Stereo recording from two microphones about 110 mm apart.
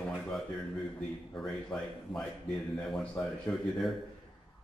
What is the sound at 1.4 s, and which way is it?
A man's voice, 5° left (ahead or behind).